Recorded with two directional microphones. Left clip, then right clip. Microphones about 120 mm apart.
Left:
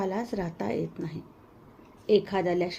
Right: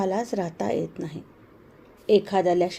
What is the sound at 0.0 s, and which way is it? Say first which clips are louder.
Speech: right 5 dB; 50° right (ahead or behind).